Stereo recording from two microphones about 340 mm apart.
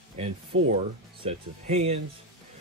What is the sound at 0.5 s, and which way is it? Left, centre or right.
Speech, right.